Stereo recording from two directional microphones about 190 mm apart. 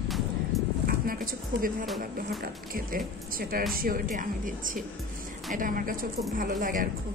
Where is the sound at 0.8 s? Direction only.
50° right (ahead or behind).